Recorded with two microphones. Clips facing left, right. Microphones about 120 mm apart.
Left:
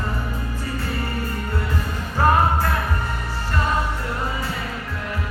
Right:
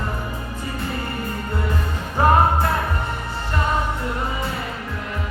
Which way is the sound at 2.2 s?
20° right (ahead or behind).